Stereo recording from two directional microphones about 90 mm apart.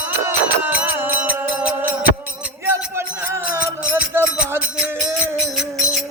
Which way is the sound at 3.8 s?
15° right (ahead or behind).